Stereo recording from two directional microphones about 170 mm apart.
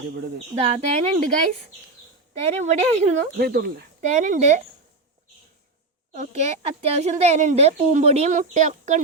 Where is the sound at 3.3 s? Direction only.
70° right (ahead or behind).